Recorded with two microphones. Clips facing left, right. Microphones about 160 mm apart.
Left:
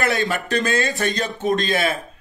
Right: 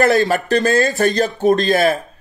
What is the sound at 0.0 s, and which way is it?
Speech, 40° right (ahead or behind).